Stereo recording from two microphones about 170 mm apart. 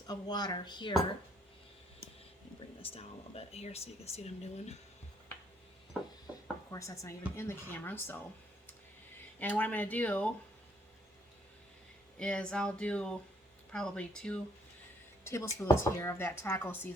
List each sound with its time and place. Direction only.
0.1 s speech: 25° left (ahead or behind)
2.8 s speech: 35° left (ahead or behind)
6.7 s speech: 20° left (ahead or behind)
9.4 s speech: 10° left (ahead or behind)
12.2 s speech: 5° left (ahead or behind)
15.2 s speech: 15° left (ahead or behind)